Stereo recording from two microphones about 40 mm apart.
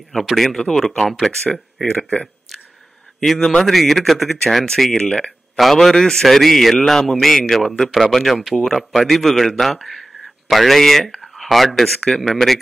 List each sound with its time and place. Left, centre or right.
0.2 s a man's voice: centre
2.0 s speech: left
2.5 s a sound: centre
3.3 s a man's voice: centre
3.6 s a man's voice: centre
5.0 s speech: left
5.6 s a man's voice: centre